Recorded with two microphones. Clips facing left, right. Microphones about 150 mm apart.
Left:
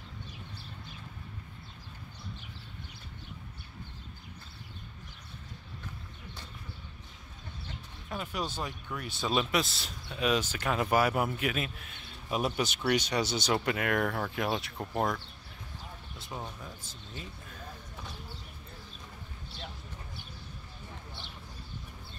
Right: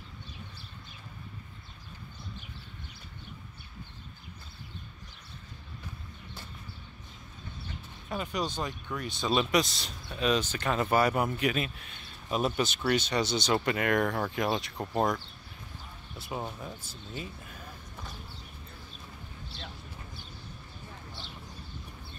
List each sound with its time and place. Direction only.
8.1 s a man's voice: centre (ahead or behind)
16.3 s speech: 25° right (ahead or behind)
16.8 s speech: 10° right (ahead or behind)